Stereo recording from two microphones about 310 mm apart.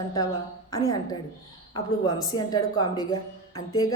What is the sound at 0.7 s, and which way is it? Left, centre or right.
Speech, centre.